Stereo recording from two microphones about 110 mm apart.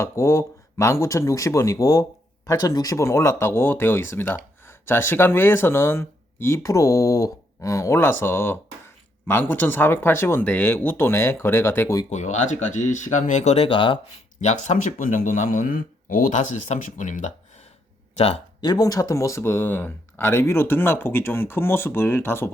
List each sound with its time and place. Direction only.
0.0 s speech: 25° left (ahead or behind)
12.1 s speech: 90° left
13.7 s speech: 50° left (ahead or behind)
14.4 s speech: 90° left
16.3 s speech: 90° left
18.2 s speech: 65° left (ahead or behind)
18.6 s speech: 35° left (ahead or behind); by 22.5 s 20° left (ahead or behind)